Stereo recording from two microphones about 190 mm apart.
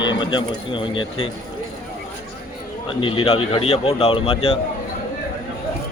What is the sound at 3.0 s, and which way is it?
Speech, 30° left (ahead or behind).